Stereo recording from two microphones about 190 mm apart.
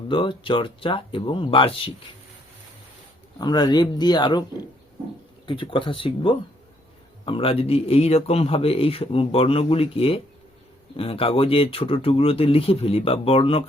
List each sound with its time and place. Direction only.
0.1 s speech: 25° left (ahead or behind)
3.3 s speech: 20° left (ahead or behind)
5.5 s speech: 25° left (ahead or behind)